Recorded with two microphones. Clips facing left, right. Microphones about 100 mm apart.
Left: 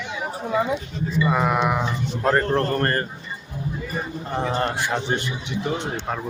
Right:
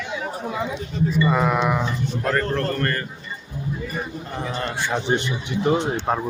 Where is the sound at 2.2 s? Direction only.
30° left (ahead or behind).